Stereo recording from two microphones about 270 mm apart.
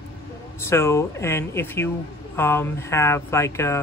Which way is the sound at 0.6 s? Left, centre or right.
Centre.